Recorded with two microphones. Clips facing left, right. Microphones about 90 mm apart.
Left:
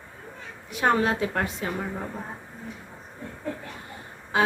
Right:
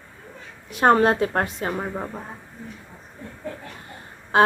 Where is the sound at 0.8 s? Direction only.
50° right (ahead or behind).